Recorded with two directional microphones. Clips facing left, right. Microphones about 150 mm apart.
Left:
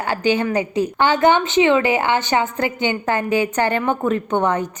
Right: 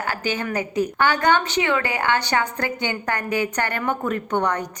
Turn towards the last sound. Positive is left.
turn(degrees=20)  # may be behind; listen again after turning